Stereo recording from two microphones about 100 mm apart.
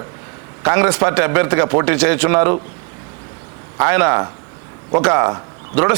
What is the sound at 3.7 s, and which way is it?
A man's voice, 20° right (ahead or behind).